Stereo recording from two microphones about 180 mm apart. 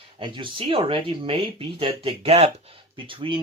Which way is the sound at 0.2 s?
30° right (ahead or behind).